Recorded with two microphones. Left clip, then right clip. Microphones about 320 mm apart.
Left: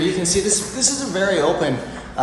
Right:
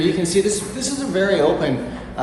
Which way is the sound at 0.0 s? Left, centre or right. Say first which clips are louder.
Right 2 dB; centre.